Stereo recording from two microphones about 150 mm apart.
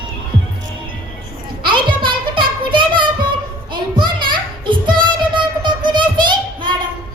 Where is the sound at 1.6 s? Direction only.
35° right (ahead or behind).